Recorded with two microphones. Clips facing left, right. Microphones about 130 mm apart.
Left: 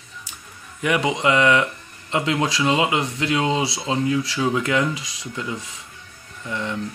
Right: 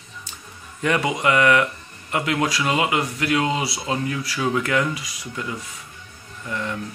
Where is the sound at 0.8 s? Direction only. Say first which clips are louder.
Left 1 dB; 15° left (ahead or behind).